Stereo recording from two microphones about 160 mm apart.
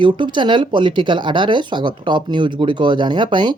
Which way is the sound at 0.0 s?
30° right (ahead or behind).